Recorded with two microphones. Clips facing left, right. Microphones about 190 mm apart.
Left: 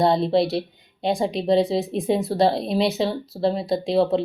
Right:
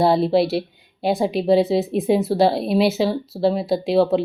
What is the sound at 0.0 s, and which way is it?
Speech, 5° right (ahead or behind).